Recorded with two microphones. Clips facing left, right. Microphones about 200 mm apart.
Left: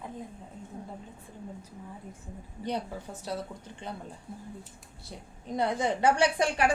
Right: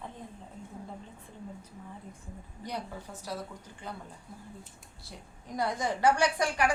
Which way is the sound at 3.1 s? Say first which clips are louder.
Left 3 dB; 30° left (ahead or behind).